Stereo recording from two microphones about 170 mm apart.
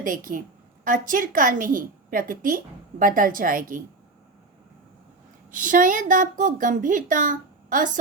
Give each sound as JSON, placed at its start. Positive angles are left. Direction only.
{"t": 0.0, "sound": "a woman's voice", "side_deg": -50}
{"t": 5.5, "sound": "a woman's voice", "side_deg": -50}